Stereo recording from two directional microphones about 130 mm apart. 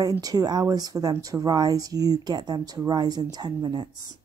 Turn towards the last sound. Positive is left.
turn(degrees=-35)  # may be behind; listen again after turning